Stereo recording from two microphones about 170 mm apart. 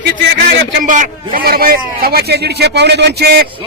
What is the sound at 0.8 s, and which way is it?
A man's voice, 50° right (ahead or behind).